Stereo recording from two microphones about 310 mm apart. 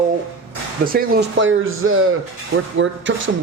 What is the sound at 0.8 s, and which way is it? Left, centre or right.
A man's voice, right.